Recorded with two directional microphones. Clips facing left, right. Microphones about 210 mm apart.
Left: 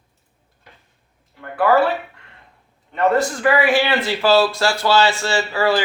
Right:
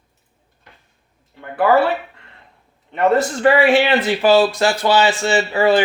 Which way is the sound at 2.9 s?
20° right (ahead or behind).